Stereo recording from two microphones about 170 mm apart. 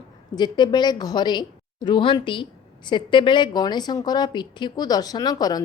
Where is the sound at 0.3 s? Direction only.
25° left (ahead or behind).